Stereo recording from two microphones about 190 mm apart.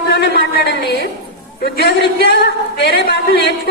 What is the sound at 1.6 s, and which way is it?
Speech, 60° left (ahead or behind).